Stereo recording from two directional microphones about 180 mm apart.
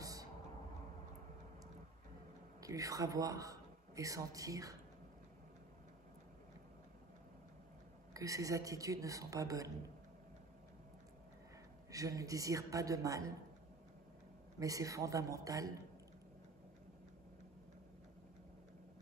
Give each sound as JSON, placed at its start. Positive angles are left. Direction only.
{"t": 0.0, "sound": "a sound", "side_deg": -20}
{"t": 2.6, "sound": "a man's voice", "side_deg": -20}
{"t": 8.1, "sound": "a woman's voice", "side_deg": -20}
{"t": 11.9, "sound": "a woman's voice", "side_deg": -20}
{"t": 14.6, "sound": "a woman's voice", "side_deg": -20}